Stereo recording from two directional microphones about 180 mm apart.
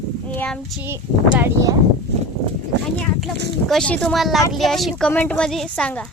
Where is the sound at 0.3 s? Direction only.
5° left (ahead or behind).